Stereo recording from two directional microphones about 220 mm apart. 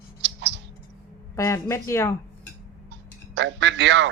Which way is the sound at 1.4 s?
10° left (ahead or behind).